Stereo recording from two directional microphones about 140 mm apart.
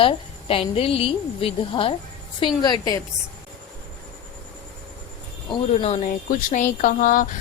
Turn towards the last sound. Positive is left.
turn(degrees=75)  # may be behind; listen again after turning